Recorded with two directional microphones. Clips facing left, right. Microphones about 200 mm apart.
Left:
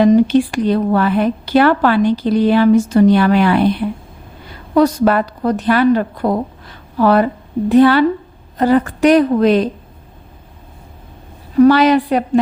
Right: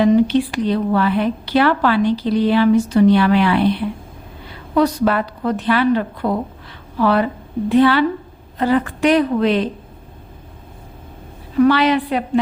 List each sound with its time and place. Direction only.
0.0 s speech: 45° left (ahead or behind)
11.6 s speech: 45° left (ahead or behind)